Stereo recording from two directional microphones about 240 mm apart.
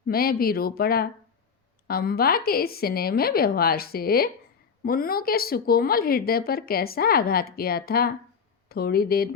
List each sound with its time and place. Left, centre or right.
0.1 s a woman's voice: left